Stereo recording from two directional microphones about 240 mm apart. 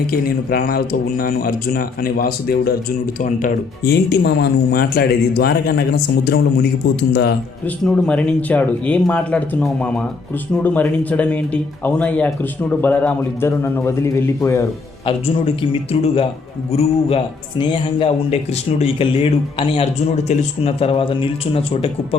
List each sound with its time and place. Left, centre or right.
0.1 s speech: left
7.9 s a man's voice: centre; by 21.8 s left